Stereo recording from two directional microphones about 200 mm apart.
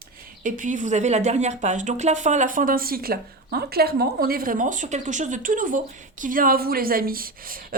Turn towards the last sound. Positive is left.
turn(degrees=-45)  # may be behind; listen again after turning